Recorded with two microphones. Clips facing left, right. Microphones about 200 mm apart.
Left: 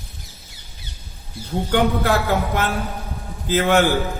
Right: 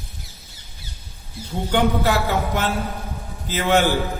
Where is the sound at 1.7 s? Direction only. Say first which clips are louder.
Left 1 dB; 55° left (ahead or behind).